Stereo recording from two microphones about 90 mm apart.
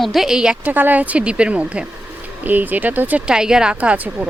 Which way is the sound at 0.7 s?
20° right (ahead or behind).